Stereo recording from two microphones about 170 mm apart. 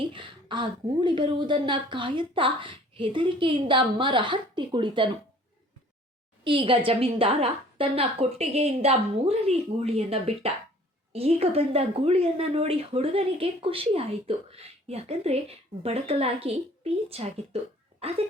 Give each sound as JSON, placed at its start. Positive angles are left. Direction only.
{"t": 0.0, "sound": "a woman's voice", "side_deg": -30}
{"t": 6.4, "sound": "speech", "side_deg": -30}